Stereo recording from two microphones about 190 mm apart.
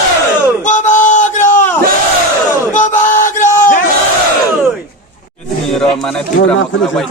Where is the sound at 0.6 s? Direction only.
40° left (ahead or behind).